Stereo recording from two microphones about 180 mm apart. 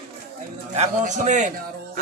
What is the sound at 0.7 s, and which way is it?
Speech, 40° right (ahead or behind).